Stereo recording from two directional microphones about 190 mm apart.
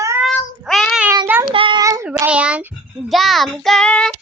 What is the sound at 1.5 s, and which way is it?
A child's voice, 25° right (ahead or behind).